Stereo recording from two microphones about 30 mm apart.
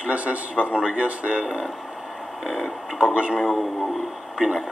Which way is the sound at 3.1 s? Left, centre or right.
Right.